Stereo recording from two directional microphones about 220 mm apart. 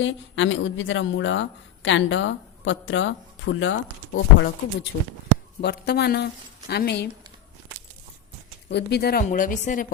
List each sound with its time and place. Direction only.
0.0 s a woman's voice: 60° left (ahead or behind)
8.7 s speech: 50° left (ahead or behind)